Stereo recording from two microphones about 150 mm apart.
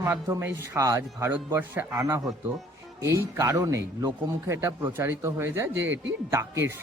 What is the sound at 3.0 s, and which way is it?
A man's voice, 20° right (ahead or behind).